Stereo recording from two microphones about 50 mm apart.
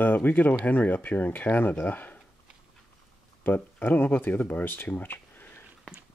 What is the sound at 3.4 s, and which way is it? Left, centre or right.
Speech, left.